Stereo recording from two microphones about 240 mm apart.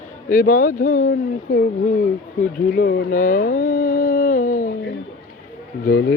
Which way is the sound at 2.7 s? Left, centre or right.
Left.